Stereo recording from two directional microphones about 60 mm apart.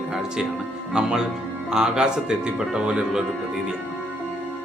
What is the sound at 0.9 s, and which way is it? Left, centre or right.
Speech, centre.